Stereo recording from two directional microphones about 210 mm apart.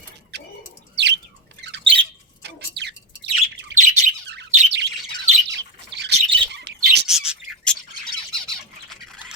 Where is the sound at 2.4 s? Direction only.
55° right (ahead or behind).